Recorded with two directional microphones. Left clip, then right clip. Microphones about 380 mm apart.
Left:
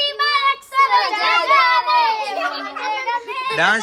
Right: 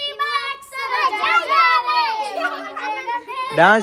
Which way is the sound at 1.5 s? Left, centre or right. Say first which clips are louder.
Left 3 dB; left.